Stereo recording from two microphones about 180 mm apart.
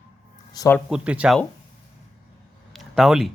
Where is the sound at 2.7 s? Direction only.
Centre (ahead or behind).